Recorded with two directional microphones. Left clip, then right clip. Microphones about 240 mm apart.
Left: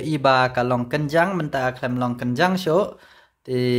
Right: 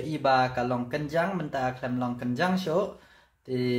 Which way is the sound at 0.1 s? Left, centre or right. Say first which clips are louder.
Left 6 dB; left.